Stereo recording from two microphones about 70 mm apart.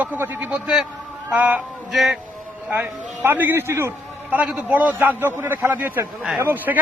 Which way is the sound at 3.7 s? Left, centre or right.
Right.